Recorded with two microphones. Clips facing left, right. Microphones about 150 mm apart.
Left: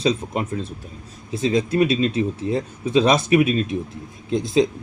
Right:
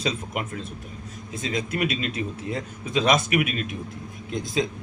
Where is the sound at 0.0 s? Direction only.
30° left (ahead or behind).